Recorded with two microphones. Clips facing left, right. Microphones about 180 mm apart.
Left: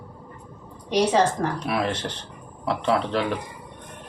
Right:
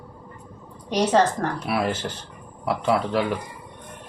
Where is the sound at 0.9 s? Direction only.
Centre (ahead or behind).